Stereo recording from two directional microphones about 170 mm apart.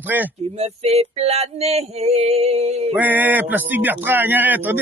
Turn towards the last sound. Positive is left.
turn(degrees=-10)  # may be behind; listen again after turning